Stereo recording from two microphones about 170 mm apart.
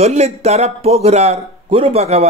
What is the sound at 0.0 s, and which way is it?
A man's voice, 40° right (ahead or behind).